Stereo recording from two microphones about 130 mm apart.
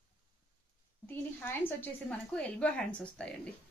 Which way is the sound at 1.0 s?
15° left (ahead or behind).